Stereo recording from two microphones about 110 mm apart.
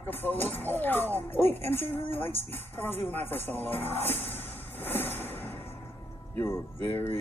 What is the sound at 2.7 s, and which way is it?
Speech, 15° left (ahead or behind).